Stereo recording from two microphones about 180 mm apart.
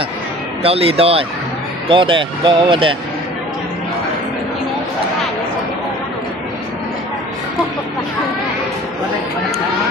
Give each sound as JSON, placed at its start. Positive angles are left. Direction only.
{"t": 0.6, "sound": "speech", "side_deg": -30}